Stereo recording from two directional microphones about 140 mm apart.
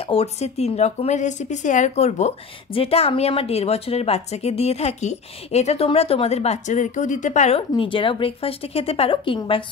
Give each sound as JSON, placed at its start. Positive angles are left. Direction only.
{"t": 0.0, "sound": "speech", "side_deg": 45}
{"t": 7.7, "sound": "speech", "side_deg": 35}